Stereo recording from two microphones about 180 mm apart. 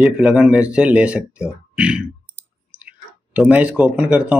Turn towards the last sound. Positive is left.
turn(degrees=-5)  # may be behind; listen again after turning